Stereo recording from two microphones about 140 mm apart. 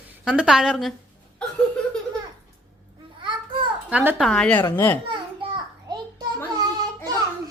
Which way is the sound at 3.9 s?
15° right (ahead or behind).